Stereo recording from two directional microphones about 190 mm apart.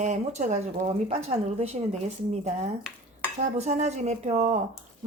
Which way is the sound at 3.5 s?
35° right (ahead or behind).